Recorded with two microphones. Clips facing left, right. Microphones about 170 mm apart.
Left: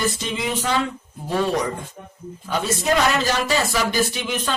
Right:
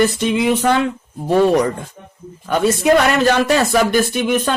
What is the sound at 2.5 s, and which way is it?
A man's voice, 55° right (ahead or behind).